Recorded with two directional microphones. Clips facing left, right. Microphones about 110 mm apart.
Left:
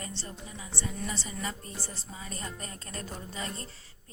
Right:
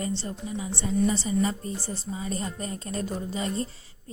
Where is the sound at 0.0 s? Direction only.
25° right (ahead or behind).